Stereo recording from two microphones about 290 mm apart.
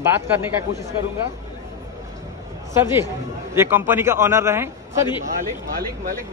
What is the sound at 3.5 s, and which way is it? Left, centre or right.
Speech, centre.